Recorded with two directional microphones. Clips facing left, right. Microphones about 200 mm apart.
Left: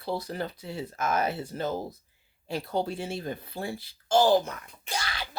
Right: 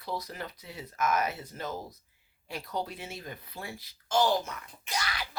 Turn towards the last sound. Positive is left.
turn(degrees=30)  # may be behind; listen again after turning